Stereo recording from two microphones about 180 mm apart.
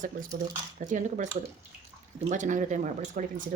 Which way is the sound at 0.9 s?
45° right (ahead or behind).